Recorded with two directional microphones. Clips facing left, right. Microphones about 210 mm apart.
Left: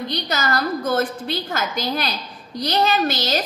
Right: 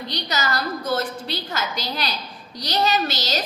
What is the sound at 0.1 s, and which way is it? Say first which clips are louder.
A woman's voice: left 1 dB; 55° left (ahead or behind).